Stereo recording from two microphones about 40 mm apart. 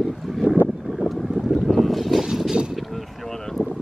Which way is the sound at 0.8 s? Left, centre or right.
Centre.